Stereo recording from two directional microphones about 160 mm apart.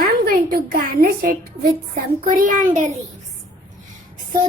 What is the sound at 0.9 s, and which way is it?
A woman's voice, 65° right (ahead or behind).